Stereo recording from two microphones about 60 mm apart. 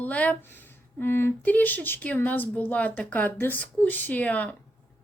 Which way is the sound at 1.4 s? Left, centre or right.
Left.